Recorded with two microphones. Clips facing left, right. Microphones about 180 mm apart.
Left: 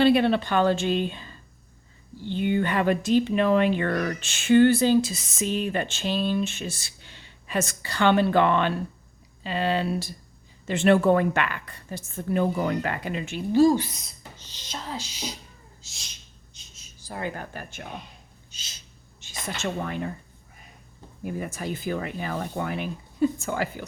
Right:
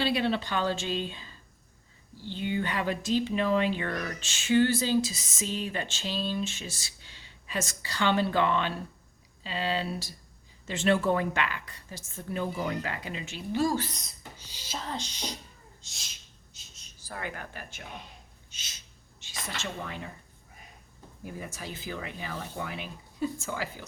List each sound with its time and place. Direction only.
0.0 s speech: 55° left (ahead or behind)
13.5 s speech: 25° left (ahead or behind)
13.7 s speech: 10° left (ahead or behind)
14.3 s speech: 10° right (ahead or behind)
16.6 s a sound: 5° right (ahead or behind)
17.1 s speech: 30° left (ahead or behind)
17.5 s speech: 50° left (ahead or behind)
18.5 s a sound: 30° left (ahead or behind)
19.2 s a sound: 50° left (ahead or behind)
19.8 s speech: 55° left (ahead or behind)
21.2 s speech: 60° left (ahead or behind)